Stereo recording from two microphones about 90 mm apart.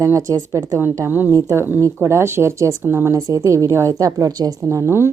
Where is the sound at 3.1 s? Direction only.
35° right (ahead or behind).